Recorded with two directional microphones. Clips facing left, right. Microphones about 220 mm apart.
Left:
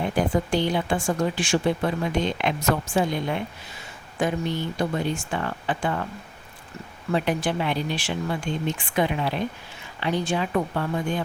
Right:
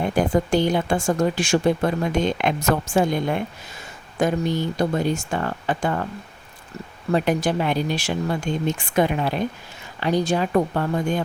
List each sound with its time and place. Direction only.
0.2 s speech: 45° right (ahead or behind)
7.1 s speech: 45° right (ahead or behind)